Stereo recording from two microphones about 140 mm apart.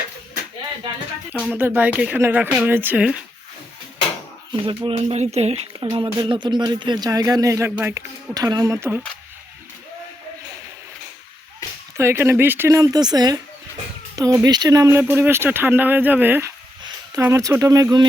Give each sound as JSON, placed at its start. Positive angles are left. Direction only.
{"t": 1.5, "sound": "speech", "side_deg": -15}
{"t": 4.5, "sound": "speech", "side_deg": -35}
{"t": 5.8, "sound": "speech", "side_deg": -35}
{"t": 11.9, "sound": "speech", "side_deg": -20}